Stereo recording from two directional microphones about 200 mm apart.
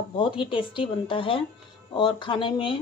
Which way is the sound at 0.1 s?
25° left (ahead or behind).